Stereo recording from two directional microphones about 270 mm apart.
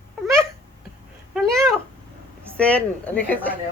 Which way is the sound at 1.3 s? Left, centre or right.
Centre.